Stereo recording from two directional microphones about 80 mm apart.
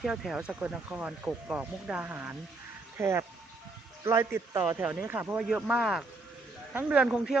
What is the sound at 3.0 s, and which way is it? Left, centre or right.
A man's voice, right.